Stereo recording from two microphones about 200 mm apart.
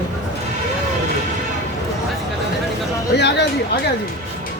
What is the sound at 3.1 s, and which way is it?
Speech, 60° left (ahead or behind).